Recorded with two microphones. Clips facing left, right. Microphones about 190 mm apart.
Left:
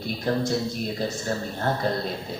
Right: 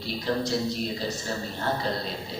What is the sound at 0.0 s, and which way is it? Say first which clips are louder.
A man's voice: left 2 dB; 50° left (ahead or behind).